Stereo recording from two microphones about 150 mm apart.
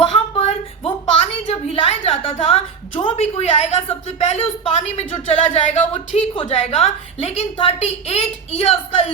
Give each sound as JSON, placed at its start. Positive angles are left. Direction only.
{"t": 0.0, "sound": "a sound", "side_deg": 40}
{"t": 3.2, "sound": "a woman's voice", "side_deg": 45}
{"t": 6.3, "sound": "a woman's voice", "side_deg": 40}